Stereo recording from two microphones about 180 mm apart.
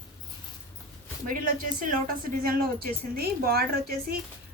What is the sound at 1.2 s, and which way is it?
A woman's voice, 50° right (ahead or behind).